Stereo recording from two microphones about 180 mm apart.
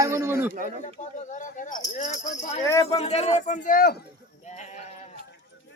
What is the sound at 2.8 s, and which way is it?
A man's voice, 35° left (ahead or behind).